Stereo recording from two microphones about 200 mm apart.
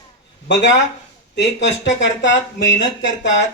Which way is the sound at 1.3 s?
60° left (ahead or behind).